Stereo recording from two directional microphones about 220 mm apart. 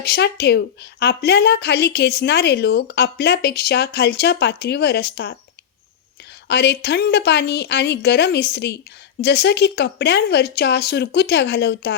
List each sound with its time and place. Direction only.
0.0 s a woman's voice: 45° left (ahead or behind)
6.5 s a woman's voice: 50° left (ahead or behind)